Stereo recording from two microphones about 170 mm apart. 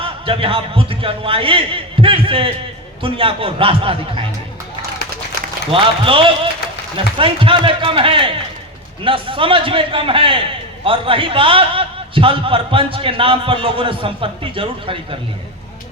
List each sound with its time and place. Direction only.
0.0 s a man's voice: 30° right (ahead or behind)
5.7 s a man's voice: 30° right (ahead or behind)